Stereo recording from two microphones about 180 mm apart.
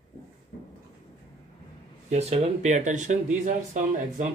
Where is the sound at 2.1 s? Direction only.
35° right (ahead or behind).